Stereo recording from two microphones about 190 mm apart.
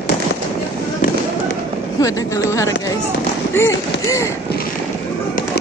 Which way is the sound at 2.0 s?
15° left (ahead or behind).